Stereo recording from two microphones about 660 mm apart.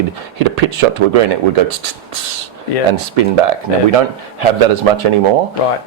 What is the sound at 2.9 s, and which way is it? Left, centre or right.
Speech, right.